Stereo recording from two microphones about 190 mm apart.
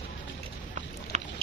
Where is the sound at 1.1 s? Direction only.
40° right (ahead or behind).